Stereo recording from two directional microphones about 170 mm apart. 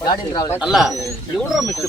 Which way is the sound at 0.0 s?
25° left (ahead or behind).